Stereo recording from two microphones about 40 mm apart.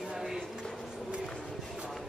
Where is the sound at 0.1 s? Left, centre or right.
Centre.